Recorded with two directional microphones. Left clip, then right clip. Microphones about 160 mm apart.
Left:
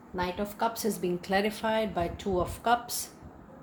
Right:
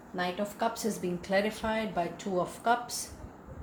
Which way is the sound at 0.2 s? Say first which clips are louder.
Left 1 dB; 50° left (ahead or behind).